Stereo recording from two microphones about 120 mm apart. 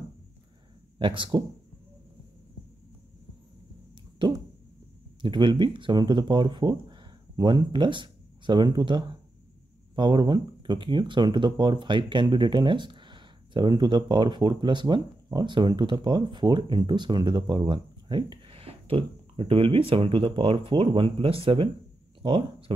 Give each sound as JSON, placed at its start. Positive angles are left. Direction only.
{"t": 0.9, "sound": "speech", "side_deg": -45}
{"t": 4.2, "sound": "a sound", "side_deg": -40}
{"t": 5.2, "sound": "speech", "side_deg": -40}
{"t": 18.6, "sound": "speech", "side_deg": -50}